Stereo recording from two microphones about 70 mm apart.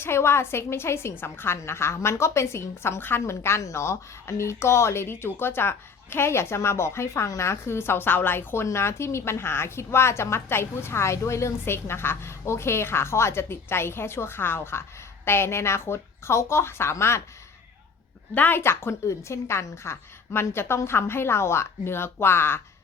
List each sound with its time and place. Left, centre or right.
0.0 s a woman's voice: left
8.6 s a woman's voice: left
18.3 s a woman's voice: left